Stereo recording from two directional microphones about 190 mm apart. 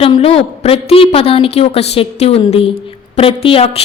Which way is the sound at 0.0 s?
30° left (ahead or behind).